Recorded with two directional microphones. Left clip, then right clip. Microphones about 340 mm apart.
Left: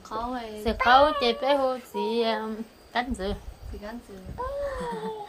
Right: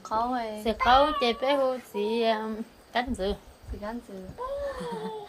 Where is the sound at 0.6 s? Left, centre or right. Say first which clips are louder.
Left 3 dB; centre.